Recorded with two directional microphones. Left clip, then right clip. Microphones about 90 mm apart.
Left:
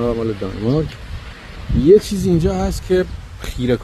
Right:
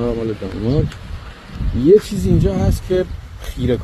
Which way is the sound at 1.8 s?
40° left (ahead or behind).